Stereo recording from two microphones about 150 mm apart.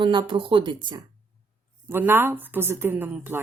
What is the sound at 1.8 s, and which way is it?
A woman's voice, 15° right (ahead or behind).